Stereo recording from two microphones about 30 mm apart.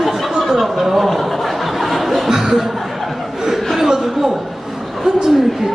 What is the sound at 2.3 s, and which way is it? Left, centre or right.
Chuckle, centre.